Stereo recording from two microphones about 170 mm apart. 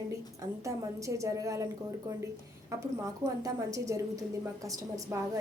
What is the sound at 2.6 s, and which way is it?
A woman's voice, 20° right (ahead or behind).